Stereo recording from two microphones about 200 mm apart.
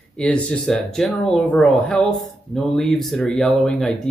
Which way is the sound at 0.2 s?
5° left (ahead or behind).